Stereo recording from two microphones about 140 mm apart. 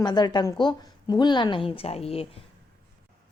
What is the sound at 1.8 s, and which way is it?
Speech, 45° left (ahead or behind).